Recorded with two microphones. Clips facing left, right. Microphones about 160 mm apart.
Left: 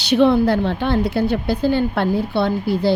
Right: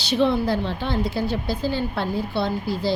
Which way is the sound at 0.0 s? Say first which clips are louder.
Left 6 dB; 65° left (ahead or behind).